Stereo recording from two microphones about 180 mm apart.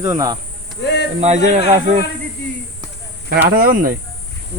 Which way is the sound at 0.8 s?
70° left (ahead or behind).